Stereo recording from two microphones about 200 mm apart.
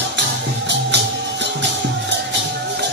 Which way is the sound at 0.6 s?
60° right (ahead or behind).